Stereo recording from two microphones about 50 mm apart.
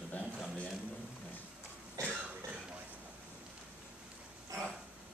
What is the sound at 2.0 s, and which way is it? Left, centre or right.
Cough, right.